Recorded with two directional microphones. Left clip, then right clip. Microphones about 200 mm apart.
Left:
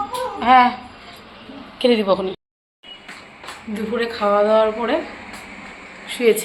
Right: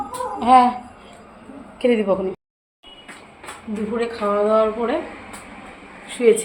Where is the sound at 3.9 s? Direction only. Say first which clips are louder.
Left 3 dB; centre (ahead or behind).